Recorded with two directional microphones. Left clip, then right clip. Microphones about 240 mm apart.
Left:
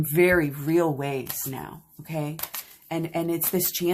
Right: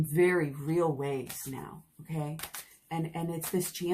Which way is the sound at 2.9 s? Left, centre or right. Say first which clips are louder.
Left 9 dB; left.